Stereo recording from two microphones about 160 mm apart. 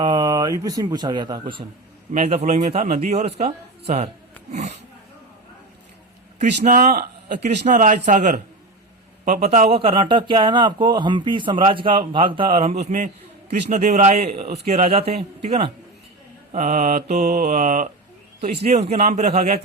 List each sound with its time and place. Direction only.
0.0 s speech: 25° right (ahead or behind)
2.1 s a man's voice: 45° right (ahead or behind)
6.4 s a man's voice: 55° right (ahead or behind); by 12.5 s 30° right (ahead or behind)
12.8 s a man's voice: 55° right (ahead or behind); by 15.7 s 40° right (ahead or behind)
16.5 s a man's voice: 50° right (ahead or behind)
18.6 s a man's voice: 40° right (ahead or behind)